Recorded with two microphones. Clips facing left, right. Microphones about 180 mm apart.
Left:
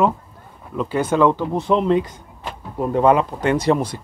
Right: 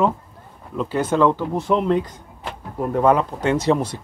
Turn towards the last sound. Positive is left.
turn(degrees=0)  # may be behind; listen again after turning